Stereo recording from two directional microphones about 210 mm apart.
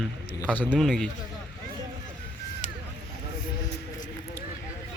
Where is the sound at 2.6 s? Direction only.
35° left (ahead or behind).